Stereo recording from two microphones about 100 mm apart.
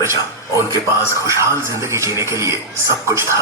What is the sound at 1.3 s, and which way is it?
Speech, 30° right (ahead or behind).